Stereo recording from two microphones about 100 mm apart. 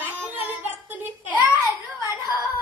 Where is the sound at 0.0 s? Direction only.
15° right (ahead or behind).